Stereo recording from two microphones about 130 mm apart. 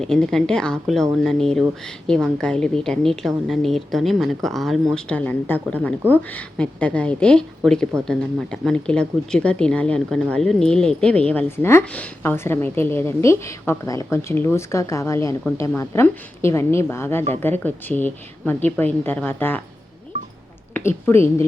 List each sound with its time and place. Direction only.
0.0 s a woman's voice: 5° left (ahead or behind)
20.7 s a woman's voice: 20° left (ahead or behind)